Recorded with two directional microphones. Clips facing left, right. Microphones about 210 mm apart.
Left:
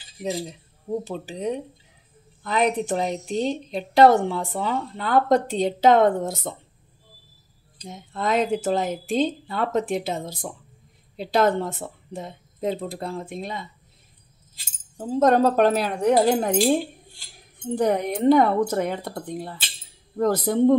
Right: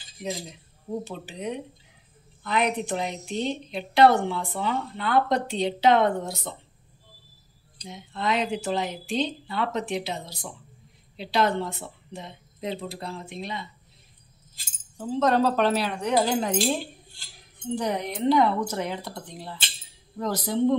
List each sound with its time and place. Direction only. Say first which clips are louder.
0.2 s a woman's voice: left 5 dB; 35° left (ahead or behind)
7.9 s a woman's voice: left 3 dB; 45° left (ahead or behind)
15.0 s a woman's voice: left 4 dB; 45° left (ahead or behind)